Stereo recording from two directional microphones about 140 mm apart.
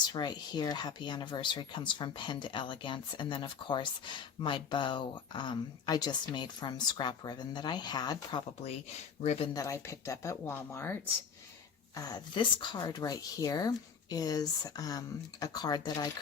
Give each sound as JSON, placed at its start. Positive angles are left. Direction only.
{"t": 0.0, "sound": "speech", "side_deg": 30}
{"t": 9.2, "sound": "speech", "side_deg": 50}
{"t": 9.5, "sound": "speech", "side_deg": 25}
{"t": 11.9, "sound": "speech", "side_deg": 30}